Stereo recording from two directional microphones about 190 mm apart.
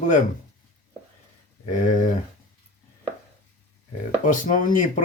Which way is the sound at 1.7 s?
40° left (ahead or behind).